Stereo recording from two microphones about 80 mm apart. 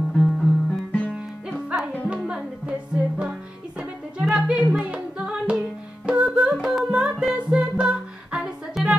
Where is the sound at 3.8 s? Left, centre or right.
Centre.